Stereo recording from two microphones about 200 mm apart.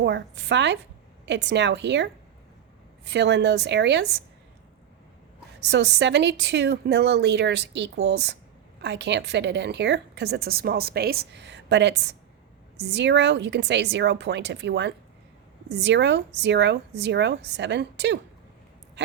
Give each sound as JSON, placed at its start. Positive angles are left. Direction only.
{"t": 0.0, "sound": "a woman's voice", "side_deg": -60}
{"t": 5.6, "sound": "a woman's voice", "side_deg": -60}